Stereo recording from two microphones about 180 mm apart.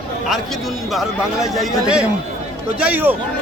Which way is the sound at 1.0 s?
Centre (ahead or behind).